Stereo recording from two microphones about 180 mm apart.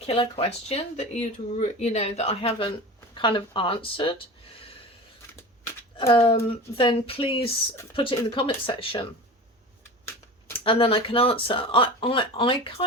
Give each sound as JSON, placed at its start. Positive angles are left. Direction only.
{"t": 0.0, "sound": "speech", "side_deg": 35}
{"t": 6.0, "sound": "speech", "side_deg": 35}
{"t": 10.6, "sound": "speech", "side_deg": 30}